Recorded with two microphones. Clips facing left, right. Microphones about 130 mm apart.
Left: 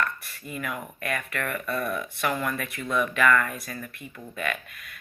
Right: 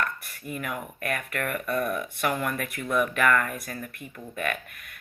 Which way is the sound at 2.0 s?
5° right (ahead or behind).